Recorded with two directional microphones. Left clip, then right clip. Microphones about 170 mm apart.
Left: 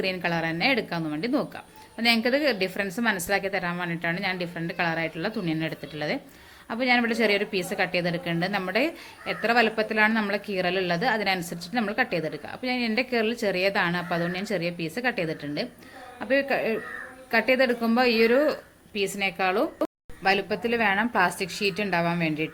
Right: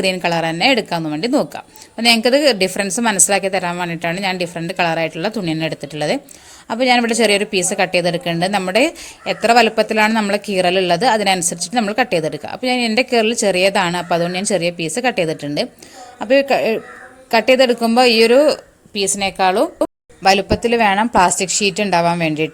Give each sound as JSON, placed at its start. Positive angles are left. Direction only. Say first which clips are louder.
{"t": 0.0, "sound": "speech", "louder": "right 10 dB", "side_deg": -50}